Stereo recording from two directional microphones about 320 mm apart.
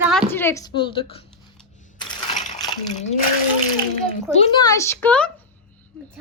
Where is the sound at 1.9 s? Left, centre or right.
Centre.